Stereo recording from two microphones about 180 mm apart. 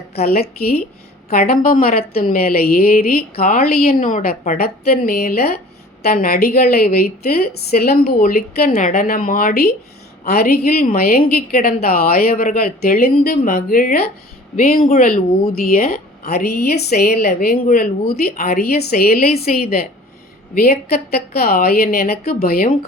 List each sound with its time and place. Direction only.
0.2 s a woman's voice: 60° left (ahead or behind)